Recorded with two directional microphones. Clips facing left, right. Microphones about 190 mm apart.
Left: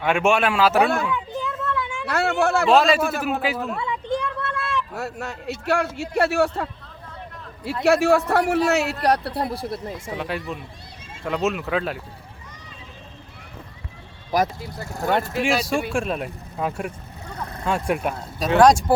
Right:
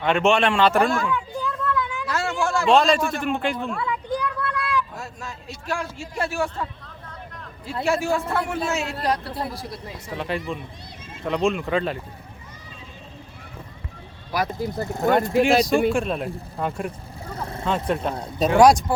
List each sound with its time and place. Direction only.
0.0 s speech: 10° left (ahead or behind)
1.4 s a sound: 25° left (ahead or behind)
2.0 s a sound: 60° left (ahead or behind)
2.6 s speech: 5° left (ahead or behind)
3.8 s a sound: 25° left (ahead or behind)
4.9 s a man's voice: 65° left (ahead or behind)
7.9 s a man's voice: 70° left (ahead or behind)
10.2 s speech: centre (ahead or behind)
14.3 s speech: 45° left (ahead or behind)
14.7 s speech: 20° right (ahead or behind)
15.0 s speech: centre (ahead or behind)
18.1 s speech: 20° right (ahead or behind)